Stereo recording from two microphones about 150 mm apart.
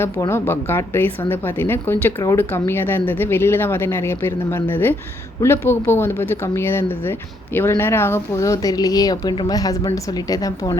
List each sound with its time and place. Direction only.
0.0 s a woman's voice: 15° left (ahead or behind)